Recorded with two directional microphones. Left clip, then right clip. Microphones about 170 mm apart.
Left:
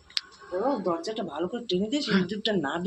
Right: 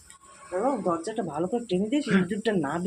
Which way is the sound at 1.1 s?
40° right (ahead or behind).